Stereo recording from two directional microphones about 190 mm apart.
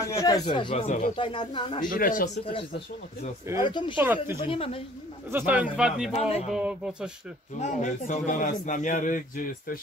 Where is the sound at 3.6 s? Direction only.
25° left (ahead or behind).